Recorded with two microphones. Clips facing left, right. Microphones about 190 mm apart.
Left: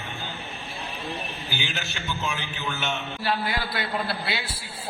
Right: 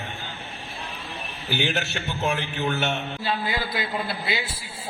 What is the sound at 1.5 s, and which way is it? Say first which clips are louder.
A man's voice: right 10 dB; 60° right (ahead or behind).